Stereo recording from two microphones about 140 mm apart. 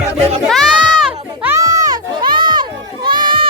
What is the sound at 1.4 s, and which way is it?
Music, 20° right (ahead or behind).